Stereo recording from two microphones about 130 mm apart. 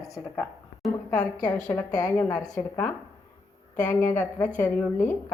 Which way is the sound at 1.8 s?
30° left (ahead or behind).